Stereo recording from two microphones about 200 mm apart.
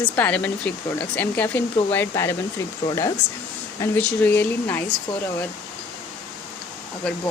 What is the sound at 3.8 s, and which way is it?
Speech, 10° left (ahead or behind).